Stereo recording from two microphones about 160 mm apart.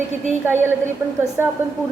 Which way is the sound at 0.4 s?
15° right (ahead or behind).